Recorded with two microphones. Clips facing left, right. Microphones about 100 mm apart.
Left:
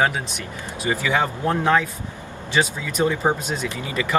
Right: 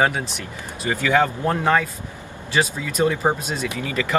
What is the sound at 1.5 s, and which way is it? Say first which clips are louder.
Speech: left 4 dB; centre (ahead or behind).